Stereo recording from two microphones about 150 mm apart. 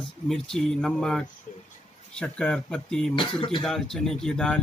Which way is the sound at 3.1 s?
35° left (ahead or behind).